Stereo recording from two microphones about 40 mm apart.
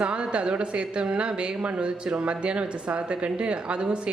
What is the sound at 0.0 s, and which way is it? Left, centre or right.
Speech, right.